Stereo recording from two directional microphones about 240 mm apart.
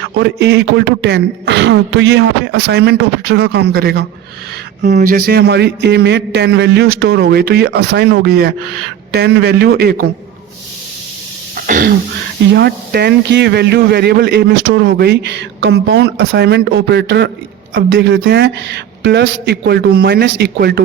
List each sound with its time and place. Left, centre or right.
0.0 s a man's voice: right
11.5 s throat clearing: right
12.4 s a man's voice: right